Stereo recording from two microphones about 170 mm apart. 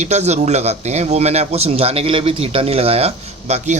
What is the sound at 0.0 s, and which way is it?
Speech, 40° right (ahead or behind).